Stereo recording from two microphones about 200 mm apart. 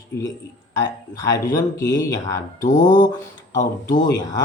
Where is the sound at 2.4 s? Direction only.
40° left (ahead or behind).